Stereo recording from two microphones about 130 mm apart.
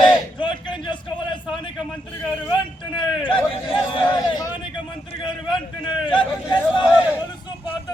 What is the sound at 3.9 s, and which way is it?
Speech, 35° left (ahead or behind).